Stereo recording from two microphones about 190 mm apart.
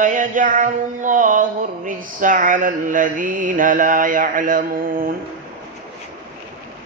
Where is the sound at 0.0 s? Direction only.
45° right (ahead or behind).